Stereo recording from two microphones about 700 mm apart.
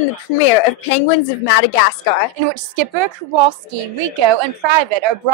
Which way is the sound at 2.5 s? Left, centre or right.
Right.